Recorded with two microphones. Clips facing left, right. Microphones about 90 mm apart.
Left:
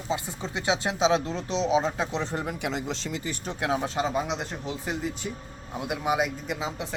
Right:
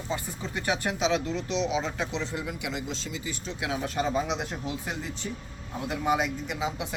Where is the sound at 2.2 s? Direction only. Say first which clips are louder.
Left 3 dB; 50° left (ahead or behind).